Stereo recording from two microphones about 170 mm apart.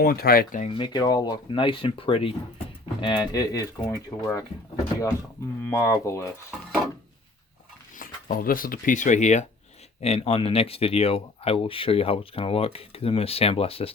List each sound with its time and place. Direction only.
0.0 s speech: 65° left (ahead or behind)
0.7 s speech: 25° left (ahead or behind)
5.6 s speech: 20° left (ahead or behind)
6.5 s dishes: centre (ahead or behind)
7.9 s speech: 55° left (ahead or behind); by 13.9 s 35° left (ahead or behind)